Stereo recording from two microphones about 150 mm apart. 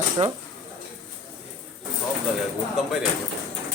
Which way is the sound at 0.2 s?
40° right (ahead or behind).